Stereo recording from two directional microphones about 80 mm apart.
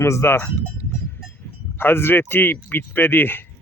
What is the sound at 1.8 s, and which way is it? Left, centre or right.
Speech, left.